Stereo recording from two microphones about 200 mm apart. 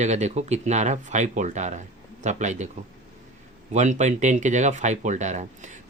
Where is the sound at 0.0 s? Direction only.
35° right (ahead or behind).